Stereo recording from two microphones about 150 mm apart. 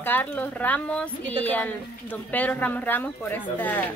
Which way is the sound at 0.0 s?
10° left (ahead or behind).